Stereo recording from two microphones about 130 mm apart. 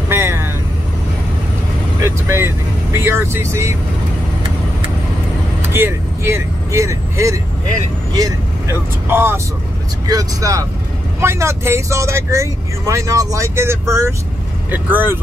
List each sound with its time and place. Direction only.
0.1 s vehicle: 20° right (ahead or behind)
2.0 s speech: 20° right (ahead or behind)
5.7 s speech: 20° right (ahead or behind)
9.1 s speech: 15° right (ahead or behind)